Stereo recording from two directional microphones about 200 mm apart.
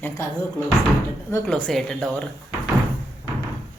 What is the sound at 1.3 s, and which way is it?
Speech, 10° left (ahead or behind).